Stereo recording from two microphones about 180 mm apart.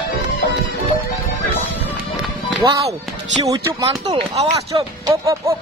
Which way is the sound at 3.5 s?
20° right (ahead or behind).